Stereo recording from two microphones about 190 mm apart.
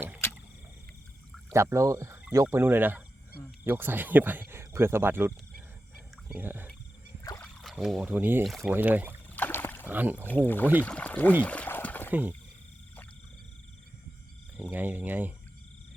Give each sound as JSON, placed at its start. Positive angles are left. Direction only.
{"t": 1.7, "sound": "speech", "side_deg": -15}
{"t": 7.3, "sound": "a sound", "side_deg": 0}
{"t": 8.1, "sound": "speech", "side_deg": -10}
{"t": 8.4, "sound": "speech", "side_deg": 0}
{"t": 9.3, "sound": "rowboat", "side_deg": 10}
{"t": 9.9, "sound": "speech", "side_deg": -10}
{"t": 10.2, "sound": "speech", "side_deg": 10}
{"t": 11.4, "sound": "trickle", "side_deg": 5}
{"t": 14.6, "sound": "speech", "side_deg": -10}